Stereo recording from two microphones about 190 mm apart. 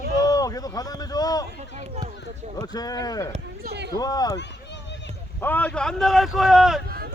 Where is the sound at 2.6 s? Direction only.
20° left (ahead or behind).